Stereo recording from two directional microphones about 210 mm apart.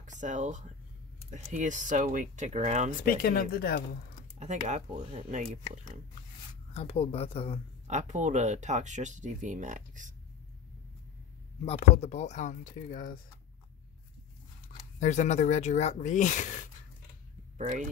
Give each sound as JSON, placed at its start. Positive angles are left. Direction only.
{"t": 0.0, "sound": "speech", "side_deg": -35}
{"t": 3.0, "sound": "speech", "side_deg": 45}
{"t": 4.4, "sound": "speech", "side_deg": -35}
{"t": 6.7, "sound": "speech", "side_deg": 30}
{"t": 7.8, "sound": "speech", "side_deg": -35}
{"t": 11.6, "sound": "speech", "side_deg": 30}
{"t": 15.0, "sound": "speech", "side_deg": 35}
{"t": 17.6, "sound": "speech", "side_deg": -35}